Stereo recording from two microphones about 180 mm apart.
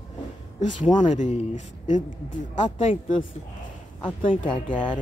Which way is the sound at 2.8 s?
30° left (ahead or behind).